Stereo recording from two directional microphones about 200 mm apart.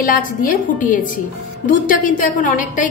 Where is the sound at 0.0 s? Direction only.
45° left (ahead or behind).